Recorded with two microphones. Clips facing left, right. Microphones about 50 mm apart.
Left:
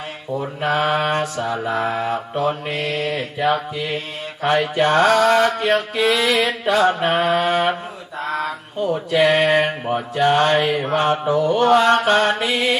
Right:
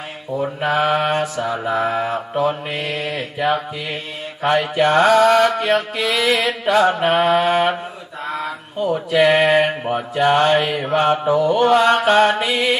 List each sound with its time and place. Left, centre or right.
0.3 s mantra: centre
2.7 s mantra: right
4.4 s mantra: centre
5.3 s music: centre
6.1 s mantra: centre
8.4 s mantra: right
8.9 s mantra: centre
10.9 s mantra: centre
12.4 s music: centre